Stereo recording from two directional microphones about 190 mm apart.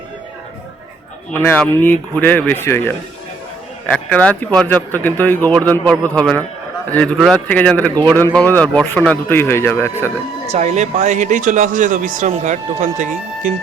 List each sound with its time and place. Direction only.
1.3 s speech: 10° left (ahead or behind)
3.9 s speech: 5° left (ahead or behind)
10.5 s a man's voice: 35° right (ahead or behind)